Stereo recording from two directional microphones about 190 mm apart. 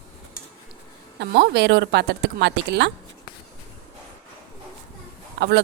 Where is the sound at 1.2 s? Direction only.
60° right (ahead or behind).